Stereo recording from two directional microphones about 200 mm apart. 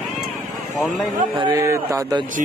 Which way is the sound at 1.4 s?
20° right (ahead or behind).